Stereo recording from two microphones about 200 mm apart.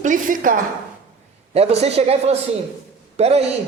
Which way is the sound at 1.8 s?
30° right (ahead or behind).